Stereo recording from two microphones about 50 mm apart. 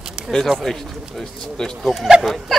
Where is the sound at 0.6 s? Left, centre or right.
Centre.